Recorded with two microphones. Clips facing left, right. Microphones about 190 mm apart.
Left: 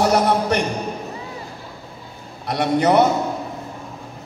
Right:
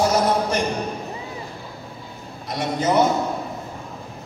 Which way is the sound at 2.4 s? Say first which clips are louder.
Left 5 dB; 65° left (ahead or behind).